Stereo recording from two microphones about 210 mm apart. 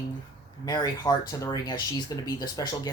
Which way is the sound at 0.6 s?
20° left (ahead or behind).